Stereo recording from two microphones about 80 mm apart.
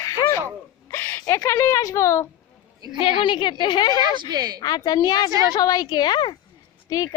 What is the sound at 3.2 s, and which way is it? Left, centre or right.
Speech, left.